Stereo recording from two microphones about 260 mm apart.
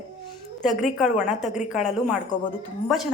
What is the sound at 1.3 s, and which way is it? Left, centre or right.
Speech, left.